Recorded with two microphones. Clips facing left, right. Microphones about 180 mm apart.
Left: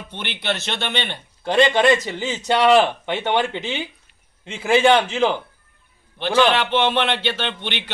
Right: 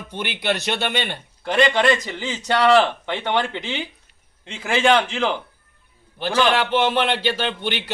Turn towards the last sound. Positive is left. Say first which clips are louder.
# right 2 dB
turn(degrees=-10)  # may be behind; listen again after turning